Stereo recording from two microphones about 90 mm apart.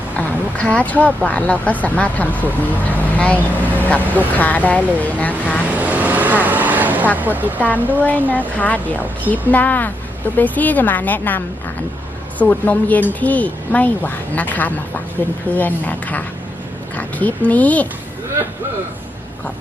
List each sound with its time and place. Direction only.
0.2 s speech: 15° left (ahead or behind)
5.6 s vehicle: 20° right (ahead or behind)
7.2 s speech: 20° right (ahead or behind)
8.3 s a woman's voice: 15° left (ahead or behind)